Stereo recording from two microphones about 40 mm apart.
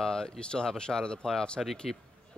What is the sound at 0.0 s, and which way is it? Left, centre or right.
Speech, centre.